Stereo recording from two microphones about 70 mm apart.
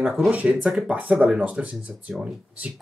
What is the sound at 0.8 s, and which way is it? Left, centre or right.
Speech, right.